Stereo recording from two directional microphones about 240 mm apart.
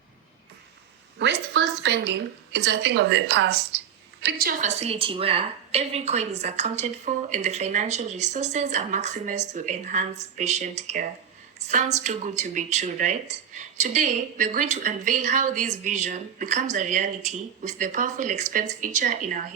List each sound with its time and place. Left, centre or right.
1.2 s a woman's voice: right